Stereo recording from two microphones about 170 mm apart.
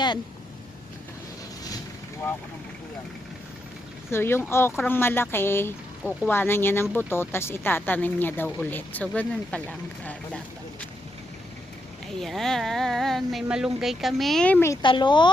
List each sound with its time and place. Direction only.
4.1 s speech: 15° left (ahead or behind)
12.2 s speech: centre (ahead or behind)
14.8 s speech: 25° left (ahead or behind)